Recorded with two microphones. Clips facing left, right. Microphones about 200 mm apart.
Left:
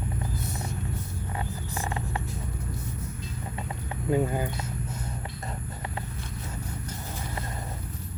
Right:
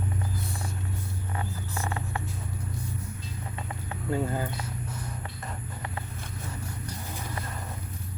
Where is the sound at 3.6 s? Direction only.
20° left (ahead or behind).